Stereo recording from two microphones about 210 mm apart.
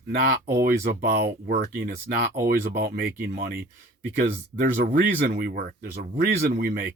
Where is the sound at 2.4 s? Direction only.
50° right (ahead or behind).